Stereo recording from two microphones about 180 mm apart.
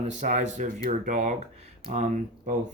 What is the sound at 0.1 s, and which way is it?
Speech, 40° right (ahead or behind).